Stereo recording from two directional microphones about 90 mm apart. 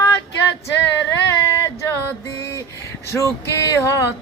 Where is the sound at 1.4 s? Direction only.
30° left (ahead or behind).